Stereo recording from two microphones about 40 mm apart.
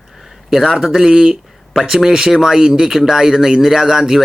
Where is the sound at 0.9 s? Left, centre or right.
Centre.